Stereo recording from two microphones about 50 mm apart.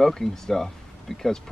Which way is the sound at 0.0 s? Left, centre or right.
Centre.